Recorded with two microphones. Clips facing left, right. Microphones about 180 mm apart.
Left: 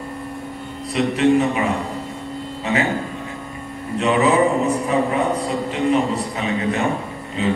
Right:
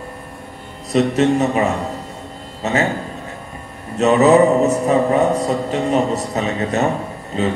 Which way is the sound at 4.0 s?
45° right (ahead or behind).